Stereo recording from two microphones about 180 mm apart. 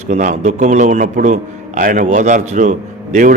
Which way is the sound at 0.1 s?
45° right (ahead or behind).